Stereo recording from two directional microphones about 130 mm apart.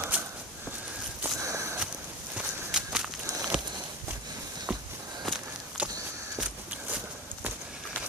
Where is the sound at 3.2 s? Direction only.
25° right (ahead or behind).